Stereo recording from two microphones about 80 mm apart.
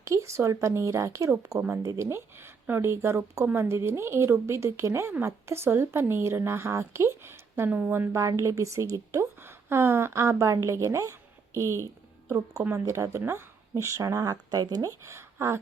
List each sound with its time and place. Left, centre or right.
0.0 s speech: right
1.6 s speech: right